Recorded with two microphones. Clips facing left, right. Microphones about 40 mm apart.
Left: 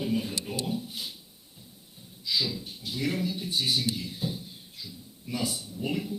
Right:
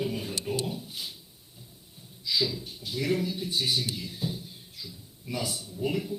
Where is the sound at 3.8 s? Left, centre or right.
Centre.